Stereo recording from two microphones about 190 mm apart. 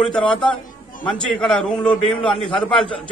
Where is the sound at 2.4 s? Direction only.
25° left (ahead or behind).